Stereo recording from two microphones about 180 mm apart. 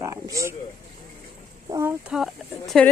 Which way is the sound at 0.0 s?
20° right (ahead or behind).